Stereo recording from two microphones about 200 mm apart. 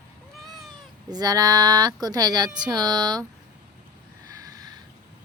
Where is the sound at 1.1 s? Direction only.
20° right (ahead or behind).